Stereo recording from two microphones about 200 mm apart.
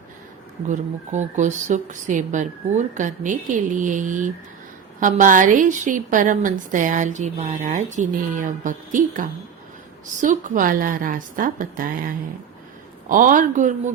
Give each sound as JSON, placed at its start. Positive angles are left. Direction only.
{"t": 0.7, "sound": "a woman's voice", "side_deg": -35}